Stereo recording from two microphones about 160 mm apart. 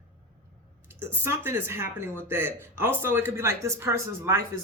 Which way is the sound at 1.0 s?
15° right (ahead or behind).